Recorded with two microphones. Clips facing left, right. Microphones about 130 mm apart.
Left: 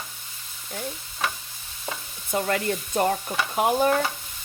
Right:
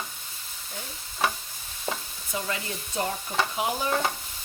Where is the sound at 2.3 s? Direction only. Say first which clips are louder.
Left 8 dB; 55° left (ahead or behind).